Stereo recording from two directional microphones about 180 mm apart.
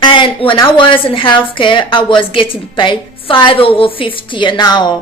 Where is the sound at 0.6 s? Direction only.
30° left (ahead or behind).